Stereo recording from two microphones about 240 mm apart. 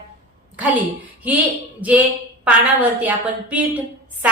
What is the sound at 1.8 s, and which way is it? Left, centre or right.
A woman's voice, centre.